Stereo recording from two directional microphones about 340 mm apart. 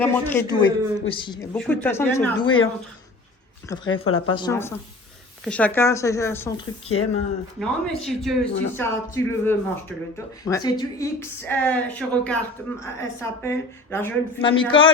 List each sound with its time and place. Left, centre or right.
0.0 s a woman's voice: centre
3.9 s speech: left
4.3 s a woman's voice: centre
6.9 s speech: left
7.6 s a man's voice: centre